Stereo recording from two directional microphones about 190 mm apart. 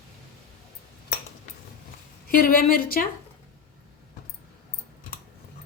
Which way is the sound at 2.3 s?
50° left (ahead or behind).